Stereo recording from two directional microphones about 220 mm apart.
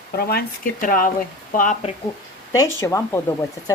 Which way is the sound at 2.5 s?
15° left (ahead or behind).